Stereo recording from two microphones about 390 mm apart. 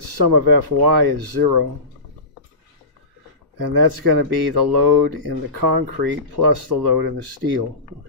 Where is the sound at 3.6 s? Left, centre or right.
Right.